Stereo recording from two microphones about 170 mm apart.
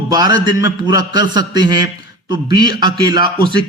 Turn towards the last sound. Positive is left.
turn(degrees=-25)  # may be behind; listen again after turning